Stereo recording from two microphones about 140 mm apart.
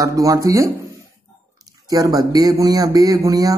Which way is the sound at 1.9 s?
25° right (ahead or behind).